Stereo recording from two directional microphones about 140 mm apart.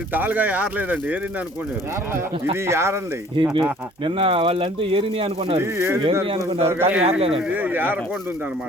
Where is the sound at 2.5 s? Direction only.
20° right (ahead or behind).